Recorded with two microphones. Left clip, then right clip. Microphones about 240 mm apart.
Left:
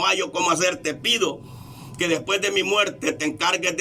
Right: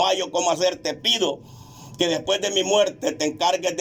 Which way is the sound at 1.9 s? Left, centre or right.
Right.